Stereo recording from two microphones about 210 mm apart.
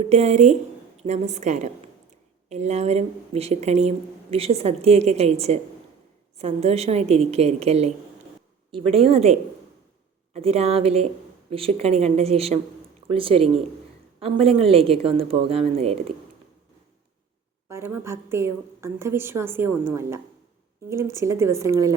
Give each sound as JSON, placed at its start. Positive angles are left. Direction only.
{"t": 0.0, "sound": "a woman's voice", "side_deg": -30}
{"t": 9.0, "sound": "a woman's voice", "side_deg": -30}
{"t": 17.7, "sound": "a woman's voice", "side_deg": -10}